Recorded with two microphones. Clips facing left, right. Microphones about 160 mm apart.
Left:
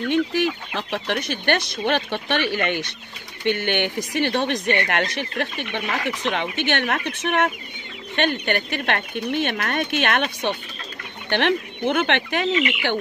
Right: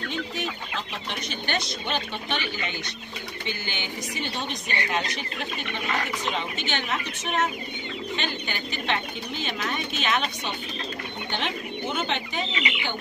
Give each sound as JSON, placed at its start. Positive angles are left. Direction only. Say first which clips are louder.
{"t": 0.1, "sound": "speech", "louder": "left 13 dB", "side_deg": 70}